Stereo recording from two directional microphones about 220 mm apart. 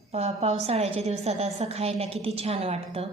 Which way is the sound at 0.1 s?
30° right (ahead or behind).